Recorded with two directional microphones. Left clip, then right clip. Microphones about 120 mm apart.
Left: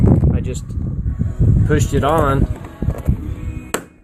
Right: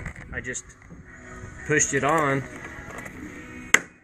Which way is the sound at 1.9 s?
25° right (ahead or behind).